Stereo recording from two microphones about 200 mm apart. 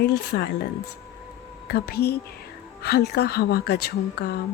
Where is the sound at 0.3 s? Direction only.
55° left (ahead or behind).